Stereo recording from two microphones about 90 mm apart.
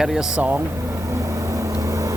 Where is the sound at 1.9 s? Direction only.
35° right (ahead or behind).